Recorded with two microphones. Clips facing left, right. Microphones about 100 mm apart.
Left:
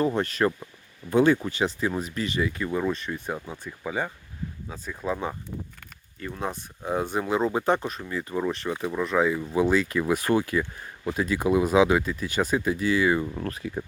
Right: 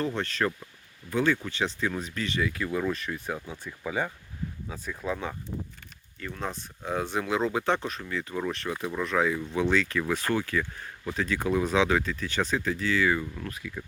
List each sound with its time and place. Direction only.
0.1 s speech: 15° left (ahead or behind)
1.5 s speech: 10° left (ahead or behind)
6.1 s speech: 25° left (ahead or behind)
6.4 s speech: 10° left (ahead or behind)
13.2 s speech: 40° left (ahead or behind)